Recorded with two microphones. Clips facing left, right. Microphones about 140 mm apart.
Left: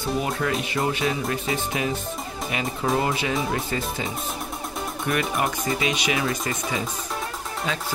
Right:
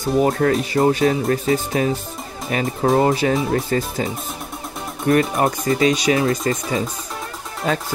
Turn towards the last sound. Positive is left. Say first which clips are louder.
# right 8 dB
turn(degrees=-50)  # may be behind; listen again after turning